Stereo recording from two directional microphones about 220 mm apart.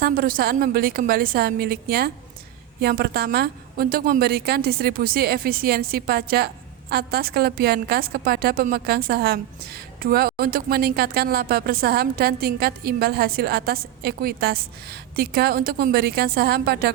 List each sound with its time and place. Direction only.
0.0 s a woman's voice: 40° right (ahead or behind)